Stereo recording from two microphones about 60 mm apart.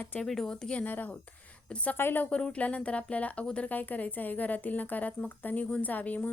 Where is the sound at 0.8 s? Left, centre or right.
Left.